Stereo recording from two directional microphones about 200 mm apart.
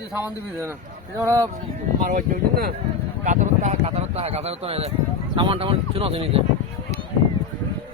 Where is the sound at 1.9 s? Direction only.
45° right (ahead or behind); by 6.4 s 30° right (ahead or behind).